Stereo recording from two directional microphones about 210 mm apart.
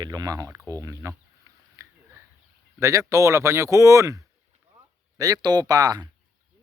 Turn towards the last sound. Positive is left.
turn(degrees=-15)  # may be behind; listen again after turning